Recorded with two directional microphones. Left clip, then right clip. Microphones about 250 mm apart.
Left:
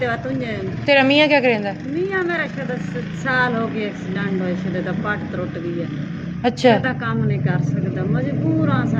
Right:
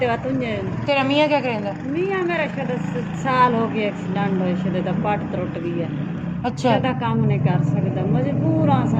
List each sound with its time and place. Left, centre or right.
0.9 s a woman's voice: left
3.4 s speech: centre
6.4 s a woman's voice: left
6.8 s speech: centre
8.6 s speech: centre